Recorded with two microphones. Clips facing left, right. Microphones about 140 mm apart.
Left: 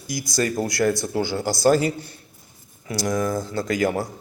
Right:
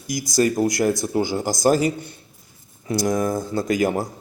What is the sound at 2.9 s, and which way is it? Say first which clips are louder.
Speech: right 2 dB; 25° right (ahead or behind).